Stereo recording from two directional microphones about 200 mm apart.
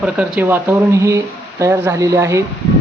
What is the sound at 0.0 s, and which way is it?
Speech, 5° right (ahead or behind).